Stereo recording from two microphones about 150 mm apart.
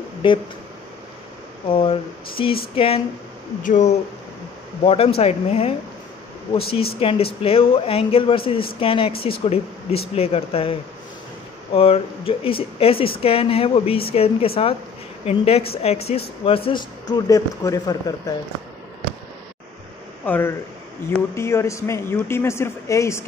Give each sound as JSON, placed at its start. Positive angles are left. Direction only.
{"t": 0.2, "sound": "speech", "side_deg": 35}
{"t": 1.7, "sound": "speech", "side_deg": 35}
{"t": 3.6, "sound": "speech", "side_deg": 55}
{"t": 4.8, "sound": "speech", "side_deg": 40}
{"t": 20.2, "sound": "speech", "side_deg": 15}